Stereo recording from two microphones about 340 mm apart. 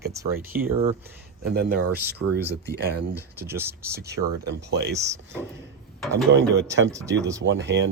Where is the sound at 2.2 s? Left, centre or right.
Right.